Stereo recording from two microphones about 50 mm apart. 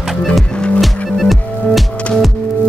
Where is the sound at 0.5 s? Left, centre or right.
Left.